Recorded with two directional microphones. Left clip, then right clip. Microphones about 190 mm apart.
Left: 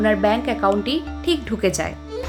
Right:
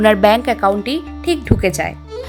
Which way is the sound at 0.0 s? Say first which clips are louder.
Right 7 dB; 50° right (ahead or behind).